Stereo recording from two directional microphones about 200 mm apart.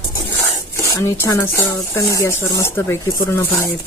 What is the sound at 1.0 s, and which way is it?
Speech, 15° left (ahead or behind).